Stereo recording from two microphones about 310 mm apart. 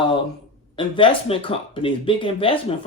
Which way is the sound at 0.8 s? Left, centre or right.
Centre.